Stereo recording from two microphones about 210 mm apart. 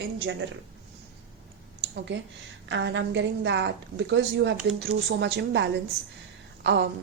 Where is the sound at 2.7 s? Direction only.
55° right (ahead or behind).